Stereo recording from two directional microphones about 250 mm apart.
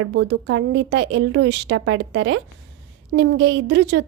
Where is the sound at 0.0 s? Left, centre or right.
Right.